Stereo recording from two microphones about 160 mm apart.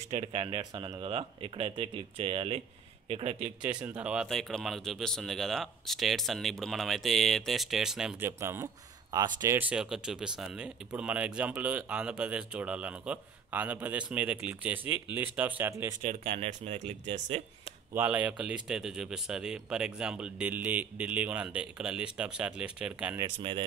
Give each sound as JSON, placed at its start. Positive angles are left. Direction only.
{"t": 0.2, "sound": "speech", "side_deg": -35}
{"t": 3.3, "sound": "speech", "side_deg": -10}
{"t": 8.3, "sound": "a man's voice", "side_deg": -15}
{"t": 9.6, "sound": "a man's voice", "side_deg": -5}
{"t": 16.0, "sound": "speech", "side_deg": -55}
{"t": 17.9, "sound": "a man's voice", "side_deg": -10}
{"t": 23.2, "sound": "speech", "side_deg": -30}